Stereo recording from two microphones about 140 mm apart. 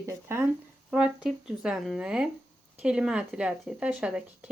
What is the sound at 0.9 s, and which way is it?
Speech, 5° right (ahead or behind).